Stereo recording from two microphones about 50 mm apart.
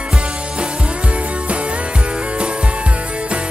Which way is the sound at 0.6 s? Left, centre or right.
Right.